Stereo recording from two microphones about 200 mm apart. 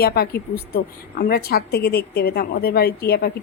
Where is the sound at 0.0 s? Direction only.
50° left (ahead or behind).